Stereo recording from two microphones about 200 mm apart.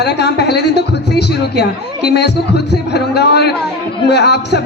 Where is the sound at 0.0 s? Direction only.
55° left (ahead or behind).